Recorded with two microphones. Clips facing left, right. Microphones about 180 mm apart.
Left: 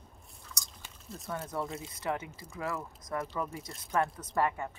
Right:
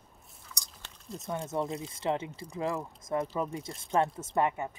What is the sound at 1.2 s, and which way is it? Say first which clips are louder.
Speech: right 4 dB; 25° right (ahead or behind).